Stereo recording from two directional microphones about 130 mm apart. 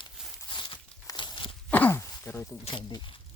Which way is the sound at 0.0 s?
35° left (ahead or behind).